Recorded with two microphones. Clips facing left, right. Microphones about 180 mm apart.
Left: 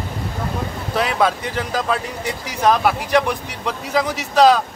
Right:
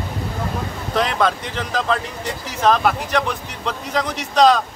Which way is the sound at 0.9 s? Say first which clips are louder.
Even; 5° left (ahead or behind).